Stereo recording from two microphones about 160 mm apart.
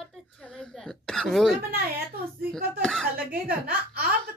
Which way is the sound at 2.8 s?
5° left (ahead or behind).